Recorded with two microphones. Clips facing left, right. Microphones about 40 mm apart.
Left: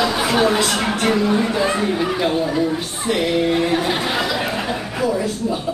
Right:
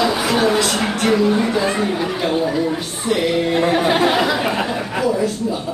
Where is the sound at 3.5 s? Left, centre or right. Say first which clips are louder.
Right 3 dB; centre.